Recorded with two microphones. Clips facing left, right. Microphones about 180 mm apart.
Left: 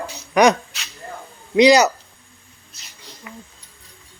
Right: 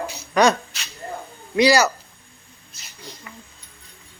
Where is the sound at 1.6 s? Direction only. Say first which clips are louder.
Left 4 dB; 20° left (ahead or behind).